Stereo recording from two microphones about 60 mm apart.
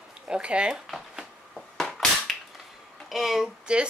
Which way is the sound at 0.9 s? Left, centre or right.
Centre.